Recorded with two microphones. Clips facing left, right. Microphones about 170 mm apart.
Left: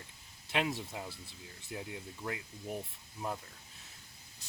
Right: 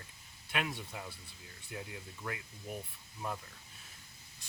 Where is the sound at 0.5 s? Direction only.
25° left (ahead or behind).